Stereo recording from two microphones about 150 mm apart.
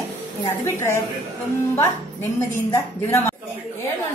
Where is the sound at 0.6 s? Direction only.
15° left (ahead or behind).